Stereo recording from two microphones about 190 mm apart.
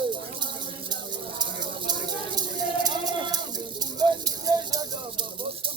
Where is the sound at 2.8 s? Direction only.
20° right (ahead or behind).